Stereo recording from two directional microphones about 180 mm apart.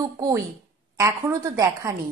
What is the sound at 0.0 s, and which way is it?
A woman's voice, 20° right (ahead or behind).